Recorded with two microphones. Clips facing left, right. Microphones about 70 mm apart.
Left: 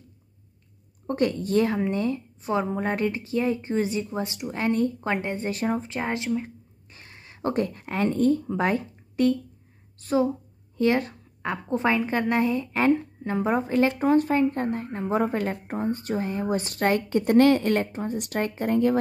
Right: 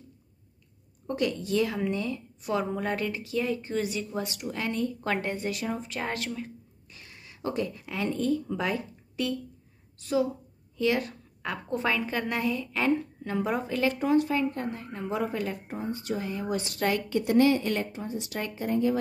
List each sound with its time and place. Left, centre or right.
1.0 s a woman's voice: left
5.0 s a woman's voice: left